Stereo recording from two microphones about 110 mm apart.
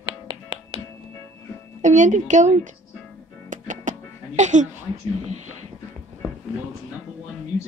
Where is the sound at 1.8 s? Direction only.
90° right.